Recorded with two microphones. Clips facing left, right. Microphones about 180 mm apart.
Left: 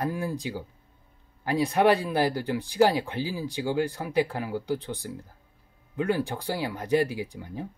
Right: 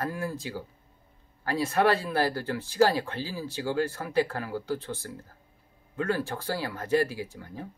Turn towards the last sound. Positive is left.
turn(degrees=15)  # may be behind; listen again after turning